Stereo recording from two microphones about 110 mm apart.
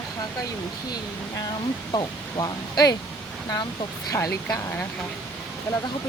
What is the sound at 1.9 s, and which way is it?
Speech, 40° left (ahead or behind).